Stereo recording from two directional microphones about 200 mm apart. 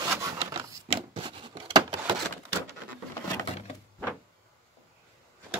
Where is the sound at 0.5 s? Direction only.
25° right (ahead or behind).